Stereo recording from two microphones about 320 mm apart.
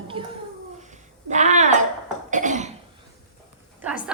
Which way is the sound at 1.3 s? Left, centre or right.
Right.